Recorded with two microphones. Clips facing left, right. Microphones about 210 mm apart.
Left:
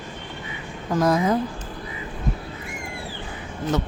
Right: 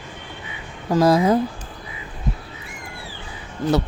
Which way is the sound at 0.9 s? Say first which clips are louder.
Right 4 dB; 30° right (ahead or behind).